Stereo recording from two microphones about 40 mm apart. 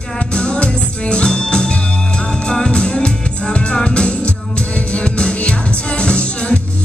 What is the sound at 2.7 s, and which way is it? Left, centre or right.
Music, left.